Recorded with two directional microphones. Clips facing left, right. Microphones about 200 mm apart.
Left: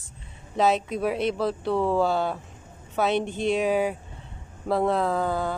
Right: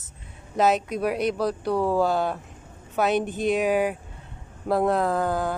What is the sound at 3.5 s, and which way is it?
Speech, centre (ahead or behind).